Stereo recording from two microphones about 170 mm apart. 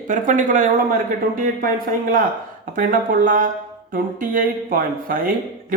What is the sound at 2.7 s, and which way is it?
Speech, 50° right (ahead or behind).